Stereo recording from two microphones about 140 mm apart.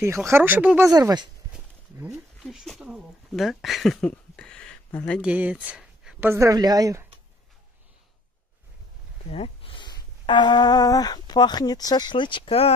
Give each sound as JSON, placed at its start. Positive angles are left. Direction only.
{"t": 0.3, "sound": "speech", "side_deg": -10}
{"t": 0.8, "sound": "speech", "side_deg": -25}
{"t": 1.5, "sound": "speech", "side_deg": -5}
{"t": 5.2, "sound": "speech", "side_deg": -10}
{"t": 6.2, "sound": "speech", "side_deg": -20}
{"t": 9.3, "sound": "speech", "side_deg": 45}